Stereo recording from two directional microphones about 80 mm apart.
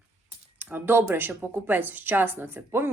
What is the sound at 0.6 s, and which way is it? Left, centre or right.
A woman's voice, right.